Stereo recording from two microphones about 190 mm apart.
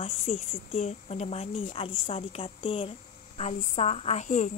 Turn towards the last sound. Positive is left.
turn(degrees=40)  # may be behind; listen again after turning